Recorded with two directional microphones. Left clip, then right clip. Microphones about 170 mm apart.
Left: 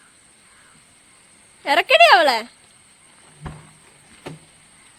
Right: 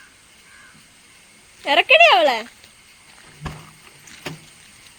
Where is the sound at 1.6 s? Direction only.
15° left (ahead or behind).